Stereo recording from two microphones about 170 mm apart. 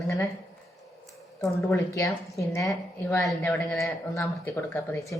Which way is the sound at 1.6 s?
20° left (ahead or behind).